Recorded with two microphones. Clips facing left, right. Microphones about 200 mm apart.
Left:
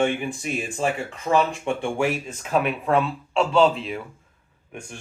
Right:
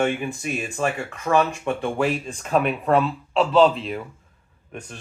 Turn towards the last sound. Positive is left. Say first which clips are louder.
# right 1 dB
turn(degrees=10)  # may be behind; listen again after turning